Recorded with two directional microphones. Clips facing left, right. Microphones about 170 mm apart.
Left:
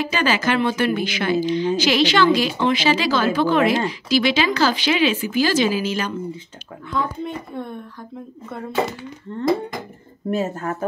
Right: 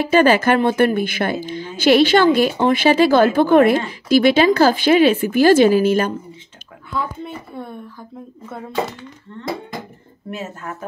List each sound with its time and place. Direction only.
0.1 s speech: 55° right (ahead or behind)
6.9 s speech: 5° right (ahead or behind)
9.3 s speech: 35° left (ahead or behind)